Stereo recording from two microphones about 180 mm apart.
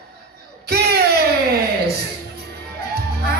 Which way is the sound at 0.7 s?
60° right (ahead or behind).